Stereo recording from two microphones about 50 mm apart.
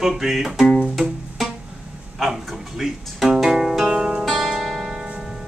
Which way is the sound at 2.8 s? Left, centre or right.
Centre.